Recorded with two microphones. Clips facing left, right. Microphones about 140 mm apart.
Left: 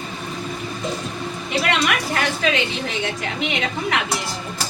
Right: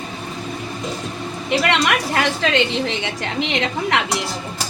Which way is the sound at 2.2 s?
90° right.